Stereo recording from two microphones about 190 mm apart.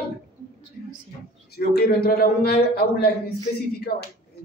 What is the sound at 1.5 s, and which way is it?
A man's voice, 55° left (ahead or behind).